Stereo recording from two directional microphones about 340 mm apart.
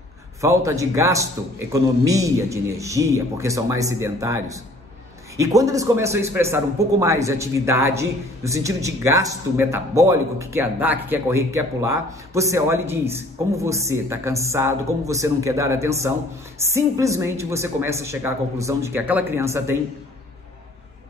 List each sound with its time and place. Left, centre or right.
0.4 s a man's voice: centre